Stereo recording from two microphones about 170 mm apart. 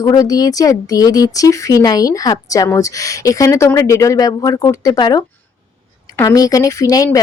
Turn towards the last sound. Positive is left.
turn(degrees=20)  # may be behind; listen again after turning